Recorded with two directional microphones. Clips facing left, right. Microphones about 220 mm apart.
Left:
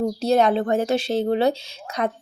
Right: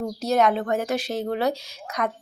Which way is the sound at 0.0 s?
30° left (ahead or behind).